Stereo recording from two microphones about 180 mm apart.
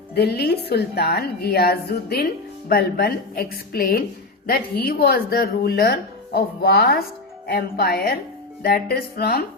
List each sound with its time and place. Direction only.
0.1 s a woman's voice: 60° left (ahead or behind)